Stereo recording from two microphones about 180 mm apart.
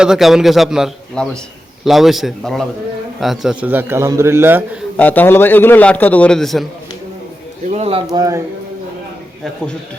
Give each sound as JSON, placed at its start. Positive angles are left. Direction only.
{"t": 0.0, "sound": "a man's voice", "side_deg": 0}
{"t": 4.9, "sound": "a man's voice", "side_deg": 10}
{"t": 7.7, "sound": "speech", "side_deg": -35}
{"t": 8.1, "sound": "speech", "side_deg": -20}